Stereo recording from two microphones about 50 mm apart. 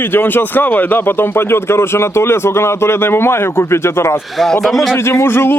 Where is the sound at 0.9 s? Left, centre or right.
Left.